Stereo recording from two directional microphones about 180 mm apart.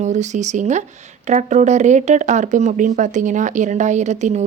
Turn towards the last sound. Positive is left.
turn(degrees=-40)  # may be behind; listen again after turning